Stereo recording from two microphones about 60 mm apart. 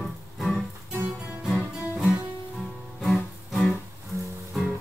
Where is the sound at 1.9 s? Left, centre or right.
Centre.